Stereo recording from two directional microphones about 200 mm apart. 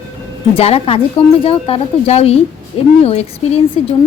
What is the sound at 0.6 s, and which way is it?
A woman's voice, 30° left (ahead or behind).